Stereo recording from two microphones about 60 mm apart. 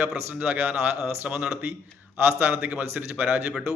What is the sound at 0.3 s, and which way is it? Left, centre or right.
Speech, right.